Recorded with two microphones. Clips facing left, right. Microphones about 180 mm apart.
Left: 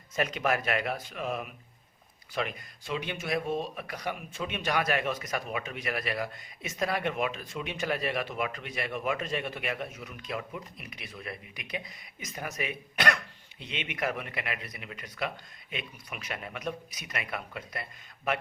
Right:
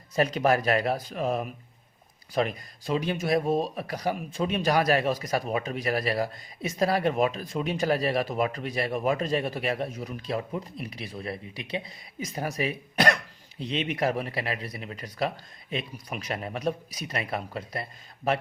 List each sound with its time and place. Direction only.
0.2 s speech: 35° right (ahead or behind)